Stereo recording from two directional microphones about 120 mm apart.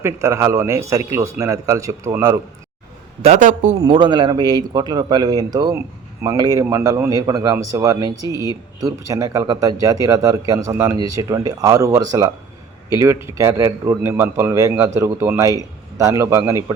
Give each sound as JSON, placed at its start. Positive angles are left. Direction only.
{"t": 0.0, "sound": "speech", "side_deg": -25}
{"t": 3.2, "sound": "a man's voice", "side_deg": -70}
{"t": 3.8, "sound": "speech", "side_deg": -40}